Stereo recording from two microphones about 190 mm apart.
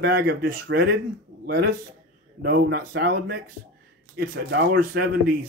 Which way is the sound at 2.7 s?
60° right (ahead or behind).